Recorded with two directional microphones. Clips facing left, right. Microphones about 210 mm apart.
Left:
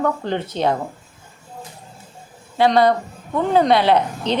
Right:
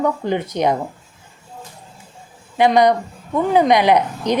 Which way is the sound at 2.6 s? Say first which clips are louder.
Right 1 dB; 15° right (ahead or behind).